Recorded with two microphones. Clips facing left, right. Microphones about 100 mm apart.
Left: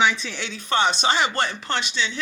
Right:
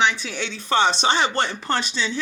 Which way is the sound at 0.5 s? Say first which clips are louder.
Right 2 dB; 30° right (ahead or behind).